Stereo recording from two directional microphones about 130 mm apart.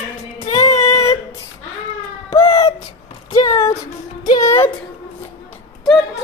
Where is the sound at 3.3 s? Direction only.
25° left (ahead or behind).